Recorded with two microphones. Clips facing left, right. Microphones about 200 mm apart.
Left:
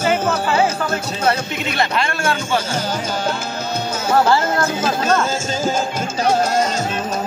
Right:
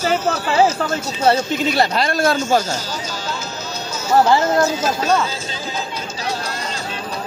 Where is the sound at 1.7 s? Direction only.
35° right (ahead or behind).